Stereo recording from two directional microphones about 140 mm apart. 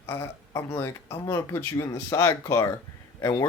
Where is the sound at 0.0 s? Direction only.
20° left (ahead or behind).